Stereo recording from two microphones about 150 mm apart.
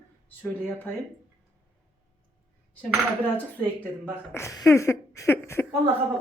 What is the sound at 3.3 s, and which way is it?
Speech, 10° left (ahead or behind).